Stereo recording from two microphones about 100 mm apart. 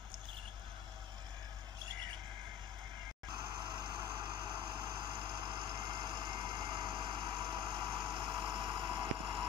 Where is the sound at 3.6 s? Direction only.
50° right (ahead or behind).